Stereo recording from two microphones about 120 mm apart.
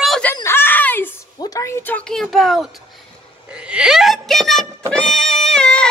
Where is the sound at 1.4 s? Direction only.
30° left (ahead or behind).